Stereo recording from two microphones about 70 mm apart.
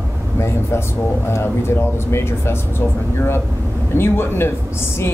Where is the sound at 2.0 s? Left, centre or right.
Left.